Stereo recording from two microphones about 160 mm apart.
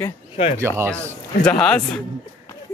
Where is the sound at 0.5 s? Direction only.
15° right (ahead or behind).